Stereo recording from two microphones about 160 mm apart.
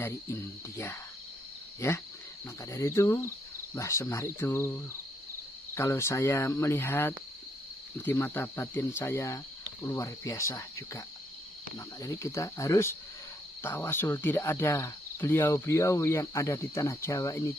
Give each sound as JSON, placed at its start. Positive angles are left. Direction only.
{"t": 0.0, "sound": "speech", "side_deg": 15}
{"t": 12.0, "sound": "speech", "side_deg": 20}